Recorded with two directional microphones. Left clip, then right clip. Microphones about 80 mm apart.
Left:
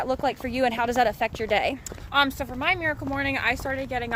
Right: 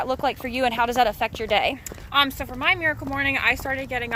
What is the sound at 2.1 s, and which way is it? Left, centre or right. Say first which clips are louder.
Speech: right 2 dB; left.